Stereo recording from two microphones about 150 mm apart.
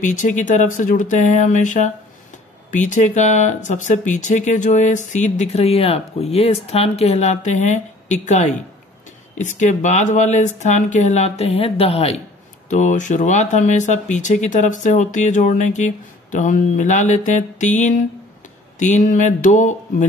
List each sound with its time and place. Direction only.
0.0 s speech: 60° left (ahead or behind); by 12.2 s 40° left (ahead or behind)
12.6 s speech: 55° left (ahead or behind)